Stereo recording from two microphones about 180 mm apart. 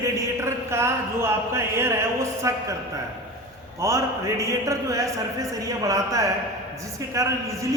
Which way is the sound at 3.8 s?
15° right (ahead or behind).